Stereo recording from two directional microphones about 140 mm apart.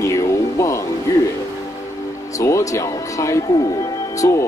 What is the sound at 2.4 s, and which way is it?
Speech, 20° left (ahead or behind).